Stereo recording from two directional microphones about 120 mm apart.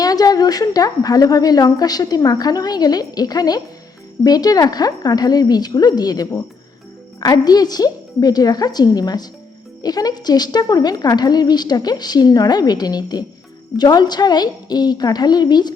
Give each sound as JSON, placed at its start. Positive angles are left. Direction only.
{"t": 0.0, "sound": "a woman's voice", "side_deg": 30}